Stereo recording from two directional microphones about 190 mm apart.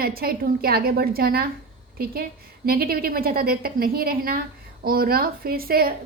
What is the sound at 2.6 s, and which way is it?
A woman's voice, 50° right (ahead or behind).